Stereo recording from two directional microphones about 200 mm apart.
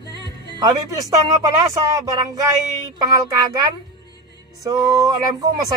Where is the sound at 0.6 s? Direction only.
15° right (ahead or behind).